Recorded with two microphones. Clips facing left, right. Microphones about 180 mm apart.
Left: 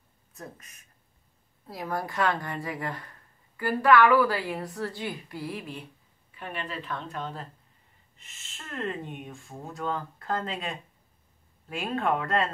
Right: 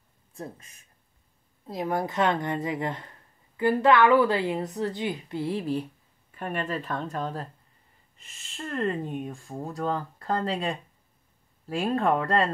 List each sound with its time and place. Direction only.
0.3 s a woman's voice: 30° right (ahead or behind)
6.3 s speech: 45° right (ahead or behind)
8.2 s speech: centre (ahead or behind)
9.0 s speech: 40° right (ahead or behind)